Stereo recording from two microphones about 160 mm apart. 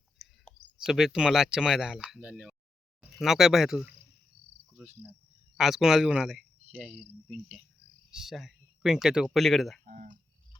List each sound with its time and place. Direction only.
0.2 s clicking: centre (ahead or behind)
0.9 s speech: 5° right (ahead or behind)
4.7 s cricket: 10° right (ahead or behind)
5.5 s speech: centre (ahead or behind)
9.8 s speech: 55° right (ahead or behind)